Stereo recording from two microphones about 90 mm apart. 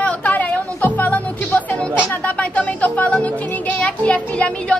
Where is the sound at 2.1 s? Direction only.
15° left (ahead or behind).